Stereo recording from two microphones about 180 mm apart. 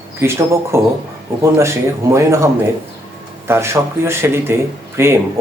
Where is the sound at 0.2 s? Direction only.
15° right (ahead or behind).